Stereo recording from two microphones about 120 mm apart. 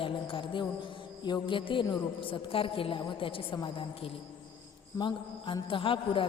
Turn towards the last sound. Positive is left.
turn(degrees=45)  # may be behind; listen again after turning